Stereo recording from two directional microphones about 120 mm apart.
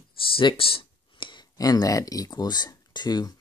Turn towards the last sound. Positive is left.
turn(degrees=35)  # may be behind; listen again after turning